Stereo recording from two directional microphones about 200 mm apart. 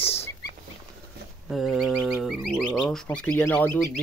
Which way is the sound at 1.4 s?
Centre (ahead or behind).